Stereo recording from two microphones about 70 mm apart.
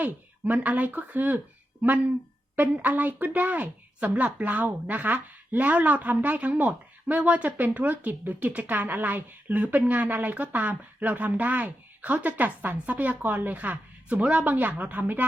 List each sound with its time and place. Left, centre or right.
0.0 s speech: right